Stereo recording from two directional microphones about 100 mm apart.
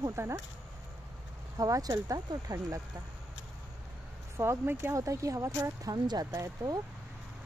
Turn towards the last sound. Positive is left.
turn(degrees=-35)  # may be behind; listen again after turning